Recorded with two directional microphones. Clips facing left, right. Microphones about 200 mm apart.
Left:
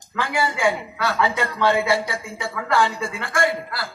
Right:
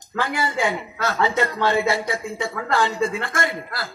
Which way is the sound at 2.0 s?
20° right (ahead or behind).